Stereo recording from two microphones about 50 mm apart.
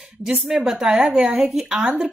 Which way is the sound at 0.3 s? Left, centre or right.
Right.